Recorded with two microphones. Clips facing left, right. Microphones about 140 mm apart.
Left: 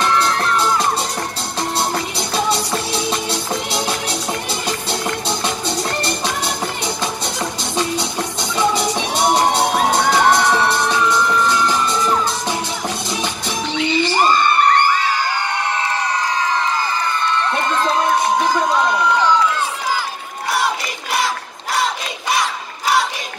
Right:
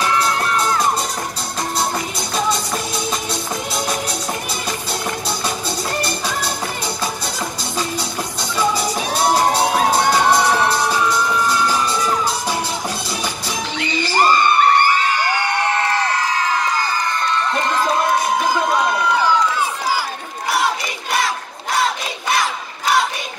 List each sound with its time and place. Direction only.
0.0 s music: centre (ahead or behind)
1.8 s music: 25° left (ahead or behind)
5.8 s music: 25° left (ahead or behind)
8.5 s music: 25° left (ahead or behind)
9.6 s music: centre (ahead or behind)
13.7 s music: centre (ahead or behind)
20.5 s crowd: centre (ahead or behind)